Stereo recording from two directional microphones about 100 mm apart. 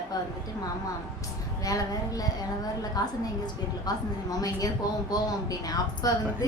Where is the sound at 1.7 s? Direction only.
35° left (ahead or behind).